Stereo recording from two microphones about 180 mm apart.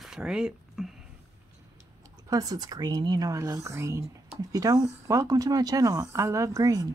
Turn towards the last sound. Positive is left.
turn(degrees=-20)  # may be behind; listen again after turning